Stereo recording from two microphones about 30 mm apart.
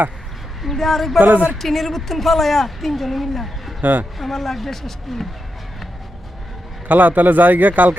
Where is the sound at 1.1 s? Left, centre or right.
Right.